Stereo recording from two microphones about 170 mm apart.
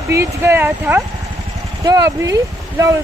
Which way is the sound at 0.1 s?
15° right (ahead or behind).